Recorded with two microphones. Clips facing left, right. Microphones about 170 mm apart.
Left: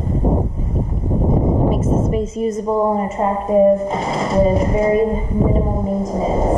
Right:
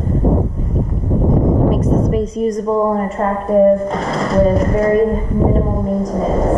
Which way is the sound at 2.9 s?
10° left (ahead or behind).